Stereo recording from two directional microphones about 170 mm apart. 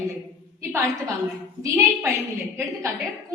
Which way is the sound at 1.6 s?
15° right (ahead or behind).